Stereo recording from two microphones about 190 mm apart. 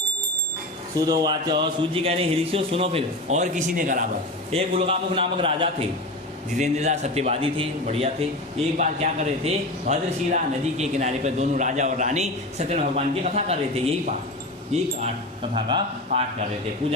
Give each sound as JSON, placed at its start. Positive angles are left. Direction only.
{"t": 0.9, "sound": "a man's voice", "side_deg": -20}
{"t": 4.5, "sound": "a man's voice", "side_deg": -30}
{"t": 14.7, "sound": "a man's voice", "side_deg": -30}